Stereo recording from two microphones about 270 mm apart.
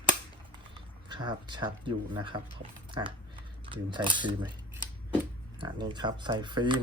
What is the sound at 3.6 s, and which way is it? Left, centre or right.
Speech, centre.